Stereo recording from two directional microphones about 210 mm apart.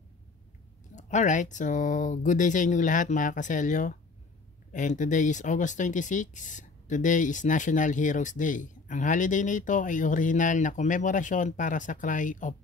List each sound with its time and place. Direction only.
0.9 s speech: 35° left (ahead or behind)